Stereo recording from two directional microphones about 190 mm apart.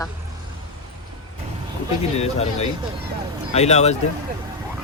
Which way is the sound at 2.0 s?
35° left (ahead or behind).